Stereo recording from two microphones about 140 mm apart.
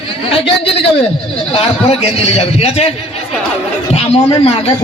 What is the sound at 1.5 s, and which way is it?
A man's voice, 45° left (ahead or behind).